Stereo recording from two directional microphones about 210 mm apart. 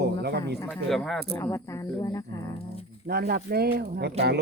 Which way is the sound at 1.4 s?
15° left (ahead or behind).